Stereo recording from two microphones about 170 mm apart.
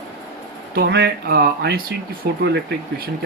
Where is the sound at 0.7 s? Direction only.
70° right (ahead or behind).